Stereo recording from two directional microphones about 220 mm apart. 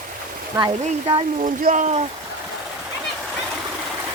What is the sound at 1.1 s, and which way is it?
Speech, 30° right (ahead or behind).